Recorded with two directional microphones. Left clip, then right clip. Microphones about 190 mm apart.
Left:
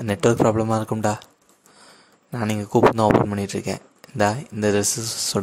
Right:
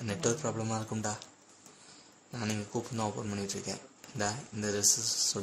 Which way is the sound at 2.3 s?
40° left (ahead or behind).